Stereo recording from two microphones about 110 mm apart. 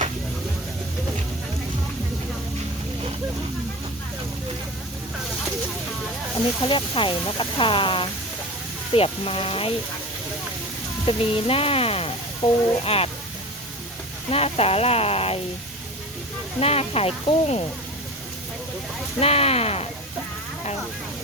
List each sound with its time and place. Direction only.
6.6 s speech: 50° left (ahead or behind)
11.0 s speech: 60° left (ahead or behind)
14.3 s speech: 65° left (ahead or behind)
16.6 s speech: 65° left (ahead or behind)
19.2 s speech: 70° left (ahead or behind)